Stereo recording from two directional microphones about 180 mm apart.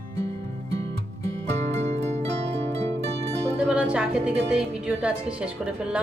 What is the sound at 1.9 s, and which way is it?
Pizzicato, 40° right (ahead or behind).